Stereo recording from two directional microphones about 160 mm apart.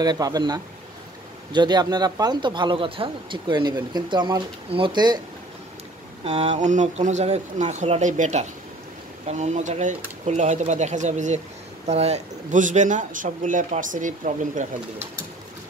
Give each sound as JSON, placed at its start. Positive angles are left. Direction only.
{"t": 0.0, "sound": "speech", "side_deg": -25}
{"t": 6.2, "sound": "speech", "side_deg": -40}